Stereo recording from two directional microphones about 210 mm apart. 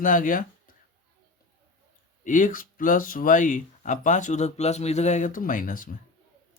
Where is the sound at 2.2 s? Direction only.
40° left (ahead or behind).